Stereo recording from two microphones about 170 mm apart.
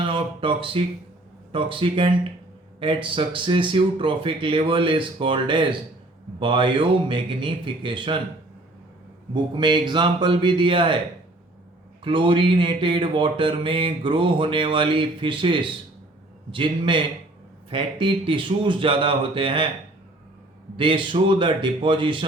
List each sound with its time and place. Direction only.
0.0 s speech: 30° right (ahead or behind)
9.3 s speech: 25° right (ahead or behind)
12.0 s speech: 30° right (ahead or behind)
20.7 s speech: 30° right (ahead or behind)